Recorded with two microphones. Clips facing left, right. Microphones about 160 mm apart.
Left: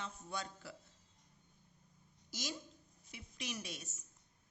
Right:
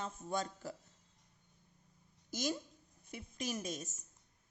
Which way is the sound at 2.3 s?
50° right (ahead or behind).